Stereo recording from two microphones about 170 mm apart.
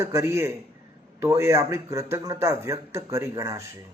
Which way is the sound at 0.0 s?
15° right (ahead or behind).